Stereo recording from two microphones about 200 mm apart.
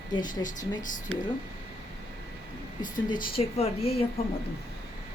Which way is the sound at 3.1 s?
25° left (ahead or behind).